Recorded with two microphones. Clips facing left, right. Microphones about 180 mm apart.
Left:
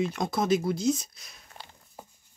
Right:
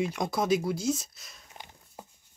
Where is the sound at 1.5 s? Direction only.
15° right (ahead or behind).